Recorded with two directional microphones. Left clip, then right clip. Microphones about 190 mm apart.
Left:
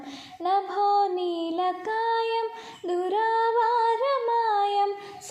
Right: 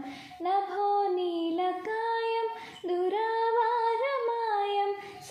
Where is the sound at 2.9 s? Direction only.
25° left (ahead or behind).